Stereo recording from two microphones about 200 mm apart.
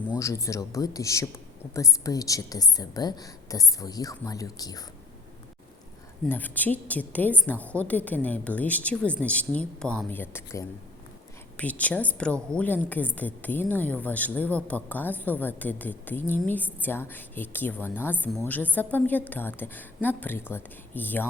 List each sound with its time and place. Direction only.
0.2 s a woman's voice: 15° left (ahead or behind)
6.2 s a woman's voice: 10° left (ahead or behind)